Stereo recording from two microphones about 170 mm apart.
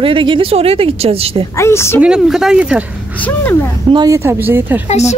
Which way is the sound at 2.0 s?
5° right (ahead or behind).